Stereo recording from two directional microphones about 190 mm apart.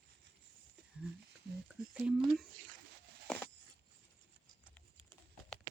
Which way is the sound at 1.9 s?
5° right (ahead or behind).